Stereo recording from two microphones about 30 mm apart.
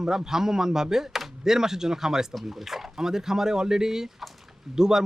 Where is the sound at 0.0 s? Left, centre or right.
Centre.